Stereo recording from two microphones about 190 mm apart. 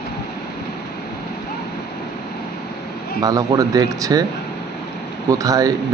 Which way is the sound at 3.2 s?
20° right (ahead or behind).